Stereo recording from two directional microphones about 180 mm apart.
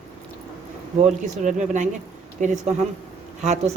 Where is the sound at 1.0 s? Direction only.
40° right (ahead or behind).